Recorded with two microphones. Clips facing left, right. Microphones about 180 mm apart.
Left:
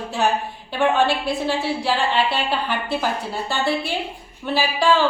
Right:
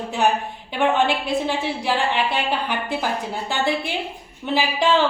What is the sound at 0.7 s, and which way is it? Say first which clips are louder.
A woman's voice: left 1 dB; 20° right (ahead or behind).